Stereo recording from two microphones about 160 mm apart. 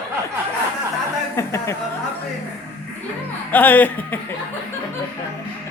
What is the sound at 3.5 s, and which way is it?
Speech, 10° left (ahead or behind).